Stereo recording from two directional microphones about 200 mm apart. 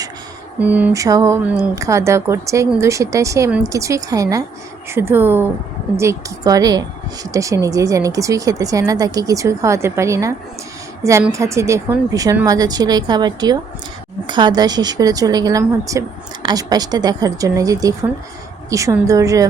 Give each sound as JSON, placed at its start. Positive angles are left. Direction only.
{"t": 0.6, "sound": "a woman's voice", "side_deg": -5}